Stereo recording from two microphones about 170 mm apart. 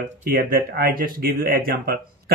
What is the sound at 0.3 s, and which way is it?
Speech, 55° right (ahead or behind).